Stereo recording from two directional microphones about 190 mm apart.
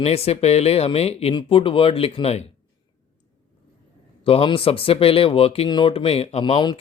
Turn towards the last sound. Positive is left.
turn(degrees=25)  # may be behind; listen again after turning